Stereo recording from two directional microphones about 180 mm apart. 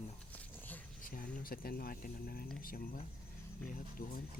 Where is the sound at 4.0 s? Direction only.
55° left (ahead or behind).